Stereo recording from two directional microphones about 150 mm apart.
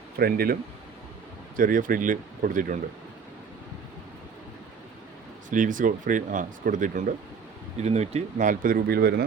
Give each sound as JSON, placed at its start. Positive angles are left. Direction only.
{"t": 0.2, "sound": "speech", "side_deg": -90}
{"t": 1.5, "sound": "speech", "side_deg": -65}
{"t": 5.5, "sound": "speech", "side_deg": -60}
{"t": 7.8, "sound": "speech", "side_deg": -45}